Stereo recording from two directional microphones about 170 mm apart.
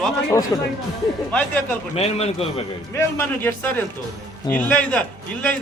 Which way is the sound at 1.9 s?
35° left (ahead or behind).